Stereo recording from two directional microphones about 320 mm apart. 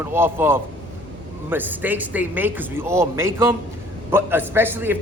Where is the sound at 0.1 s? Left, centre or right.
Centre.